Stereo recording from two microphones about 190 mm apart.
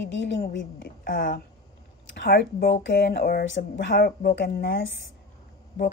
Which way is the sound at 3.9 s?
55° left (ahead or behind).